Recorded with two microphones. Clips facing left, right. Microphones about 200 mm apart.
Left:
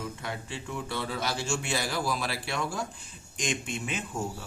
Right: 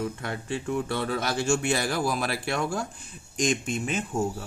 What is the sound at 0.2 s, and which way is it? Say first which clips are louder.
A man's voice: right 5 dB; 55° right (ahead or behind).